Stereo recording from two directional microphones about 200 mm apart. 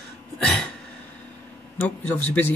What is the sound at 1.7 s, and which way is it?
Speech, 10° left (ahead or behind).